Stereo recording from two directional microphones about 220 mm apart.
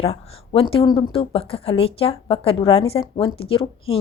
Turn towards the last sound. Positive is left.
turn(degrees=25)  # may be behind; listen again after turning